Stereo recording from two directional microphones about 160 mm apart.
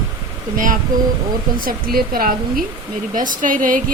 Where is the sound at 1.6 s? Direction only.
65° right (ahead or behind).